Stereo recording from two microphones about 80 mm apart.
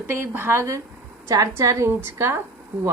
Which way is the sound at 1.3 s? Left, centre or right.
Right.